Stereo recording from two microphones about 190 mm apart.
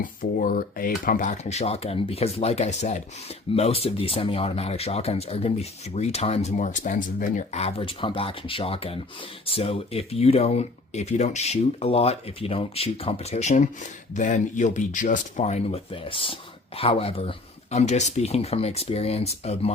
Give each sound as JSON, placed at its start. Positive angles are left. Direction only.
{"t": 0.0, "sound": "speech", "side_deg": 45}